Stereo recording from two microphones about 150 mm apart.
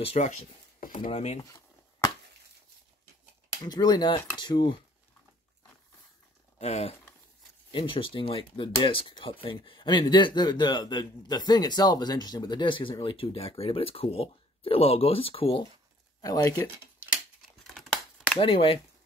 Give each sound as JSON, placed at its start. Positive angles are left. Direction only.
{"t": 0.0, "sound": "speech", "side_deg": 45}
{"t": 3.6, "sound": "speech", "side_deg": 25}
{"t": 6.6, "sound": "speech", "side_deg": 45}
{"t": 16.2, "sound": "speech", "side_deg": 25}
{"t": 18.4, "sound": "speech", "side_deg": 35}